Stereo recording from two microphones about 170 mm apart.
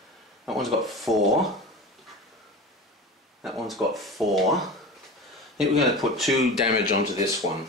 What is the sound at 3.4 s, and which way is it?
Speech, centre (ahead or behind).